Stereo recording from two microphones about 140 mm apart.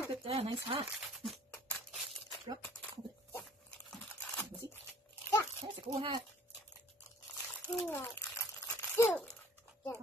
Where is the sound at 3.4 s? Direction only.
Centre (ahead or behind).